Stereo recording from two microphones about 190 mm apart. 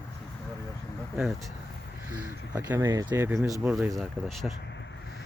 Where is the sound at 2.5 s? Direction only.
20° right (ahead or behind).